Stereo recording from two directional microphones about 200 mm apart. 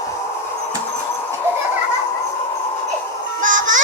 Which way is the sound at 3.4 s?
40° right (ahead or behind).